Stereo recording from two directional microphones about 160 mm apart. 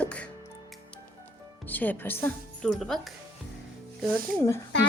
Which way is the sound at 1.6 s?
10° left (ahead or behind).